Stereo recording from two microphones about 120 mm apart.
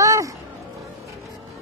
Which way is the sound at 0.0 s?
25° right (ahead or behind).